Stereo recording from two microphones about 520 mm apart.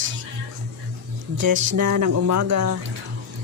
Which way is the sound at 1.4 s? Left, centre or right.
Right.